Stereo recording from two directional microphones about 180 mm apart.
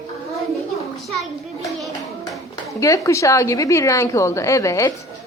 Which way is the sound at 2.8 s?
15° left (ahead or behind).